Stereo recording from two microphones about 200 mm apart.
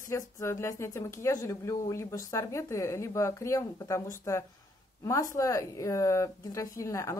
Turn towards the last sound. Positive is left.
turn(degrees=15)  # may be behind; listen again after turning